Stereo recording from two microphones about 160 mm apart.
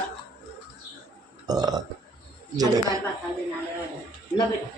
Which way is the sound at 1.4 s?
25° right (ahead or behind).